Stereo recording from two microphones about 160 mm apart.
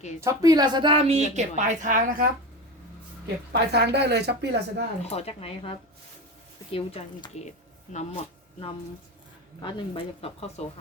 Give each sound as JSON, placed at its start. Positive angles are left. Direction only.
{"t": 0.2, "sound": "a woman's voice", "side_deg": -20}
{"t": 3.5, "sound": "speech", "side_deg": -90}
{"t": 5.0, "sound": "speech", "side_deg": 40}
{"t": 9.6, "sound": "speech", "side_deg": 30}